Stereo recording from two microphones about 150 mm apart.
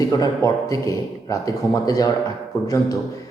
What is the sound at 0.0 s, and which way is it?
Speech, 25° left (ahead or behind).